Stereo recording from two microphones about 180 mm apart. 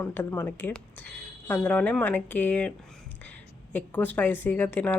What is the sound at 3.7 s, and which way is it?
A woman's voice, 10° left (ahead or behind).